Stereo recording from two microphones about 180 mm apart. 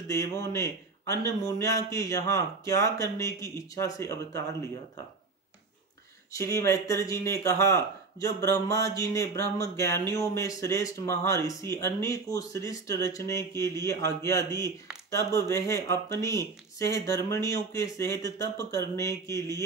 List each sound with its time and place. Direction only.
0.1 s speech: 15° left (ahead or behind)
6.3 s speech: 15° left (ahead or behind)